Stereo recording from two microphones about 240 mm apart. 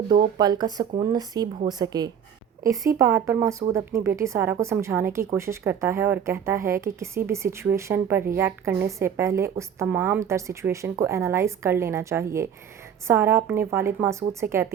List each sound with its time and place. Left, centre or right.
0.3 s speech: centre